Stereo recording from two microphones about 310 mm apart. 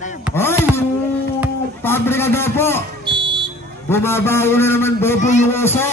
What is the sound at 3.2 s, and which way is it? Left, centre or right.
Buzzer, centre.